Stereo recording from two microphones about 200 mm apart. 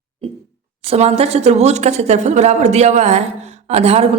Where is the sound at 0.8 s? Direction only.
30° right (ahead or behind).